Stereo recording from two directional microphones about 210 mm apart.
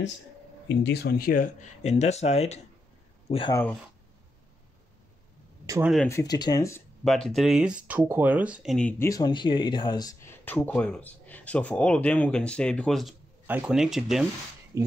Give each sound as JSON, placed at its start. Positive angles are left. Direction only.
{"t": 0.7, "sound": "speech", "side_deg": 50}
{"t": 6.0, "sound": "speech", "side_deg": 15}
{"t": 7.1, "sound": "speech", "side_deg": 0}